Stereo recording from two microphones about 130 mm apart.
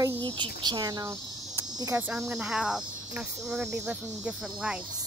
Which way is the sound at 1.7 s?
30° right (ahead or behind).